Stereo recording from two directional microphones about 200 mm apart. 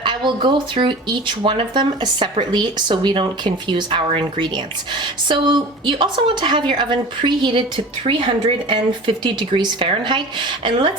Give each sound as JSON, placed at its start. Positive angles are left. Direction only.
{"t": 0.0, "sound": "speech", "side_deg": -25}